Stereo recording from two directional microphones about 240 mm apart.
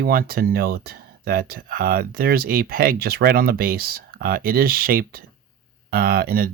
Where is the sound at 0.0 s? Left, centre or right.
Right.